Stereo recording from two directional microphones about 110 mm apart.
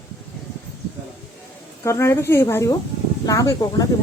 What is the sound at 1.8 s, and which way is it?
A woman's voice, 25° left (ahead or behind).